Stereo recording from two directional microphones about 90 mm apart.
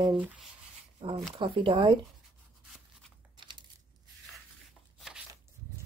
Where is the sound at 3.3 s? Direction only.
60° right (ahead or behind).